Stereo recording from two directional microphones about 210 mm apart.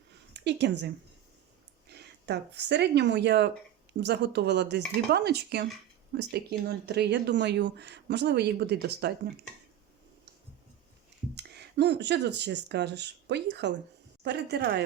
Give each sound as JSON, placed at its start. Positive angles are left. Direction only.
{"t": 0.3, "sound": "a woman's voice", "side_deg": -55}
{"t": 1.9, "sound": "speech", "side_deg": -50}
{"t": 11.3, "sound": "speech", "side_deg": -50}